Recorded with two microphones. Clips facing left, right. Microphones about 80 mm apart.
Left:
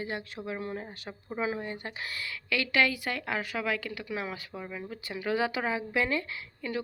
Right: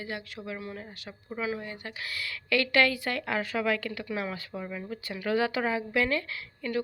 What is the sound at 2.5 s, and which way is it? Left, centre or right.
A woman's voice, centre.